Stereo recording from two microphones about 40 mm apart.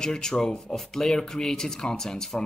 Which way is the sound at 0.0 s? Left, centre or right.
Centre.